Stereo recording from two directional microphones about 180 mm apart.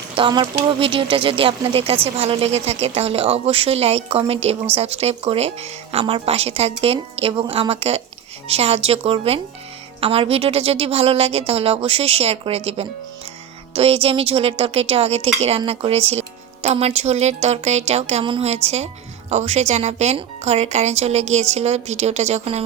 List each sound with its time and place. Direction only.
0.2 s speech: 25° right (ahead or behind)